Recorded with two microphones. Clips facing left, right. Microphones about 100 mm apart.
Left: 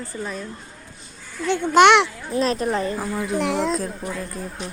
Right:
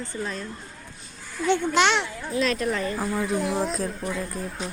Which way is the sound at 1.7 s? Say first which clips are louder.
Left 13 dB; 65° left (ahead or behind).